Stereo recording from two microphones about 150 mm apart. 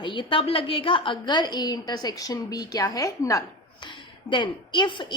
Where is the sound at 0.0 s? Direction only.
35° left (ahead or behind).